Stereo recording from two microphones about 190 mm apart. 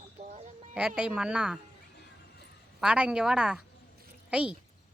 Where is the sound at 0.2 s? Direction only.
40° right (ahead or behind).